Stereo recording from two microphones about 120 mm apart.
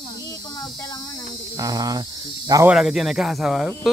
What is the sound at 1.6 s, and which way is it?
Speech, 30° right (ahead or behind).